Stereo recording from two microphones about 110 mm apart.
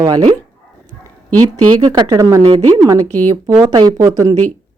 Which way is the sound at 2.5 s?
50° right (ahead or behind).